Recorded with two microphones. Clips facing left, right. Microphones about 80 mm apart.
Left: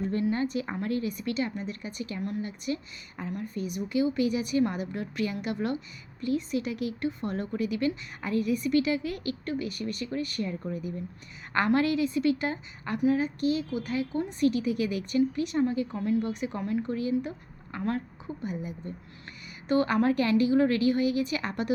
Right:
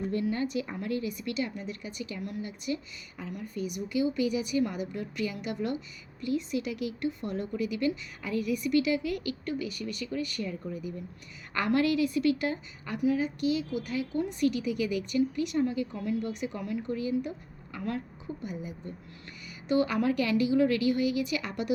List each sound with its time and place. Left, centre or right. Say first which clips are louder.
0.1 s a woman's voice: left 1 dB; left
11.5 s a woman's voice: left 2 dB; left
19.6 s a woman's voice: left 2 dB; left